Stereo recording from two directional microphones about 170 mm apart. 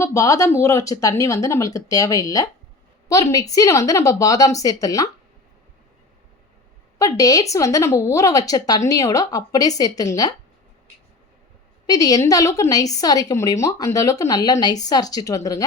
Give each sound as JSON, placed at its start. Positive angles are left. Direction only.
{"t": 0.0, "sound": "a woman's voice", "side_deg": 20}
{"t": 7.0, "sound": "a woman's voice", "side_deg": 20}
{"t": 11.9, "sound": "a woman's voice", "side_deg": 20}